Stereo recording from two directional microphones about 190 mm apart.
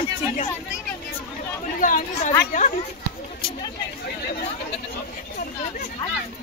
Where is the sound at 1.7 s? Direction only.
45° left (ahead or behind).